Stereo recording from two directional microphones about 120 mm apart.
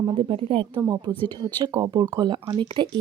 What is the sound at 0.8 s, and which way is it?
Speech, 30° right (ahead or behind).